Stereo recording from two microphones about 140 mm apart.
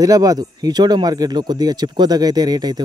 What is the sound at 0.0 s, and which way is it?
Speech, 25° right (ahead or behind).